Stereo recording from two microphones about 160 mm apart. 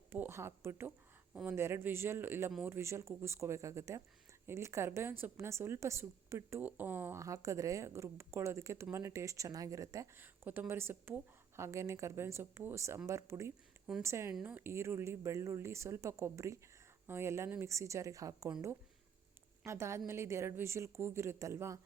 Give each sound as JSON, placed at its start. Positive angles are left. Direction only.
{"t": 0.1, "sound": "a woman's voice", "side_deg": -15}
{"t": 19.6, "sound": "a woman's voice", "side_deg": -15}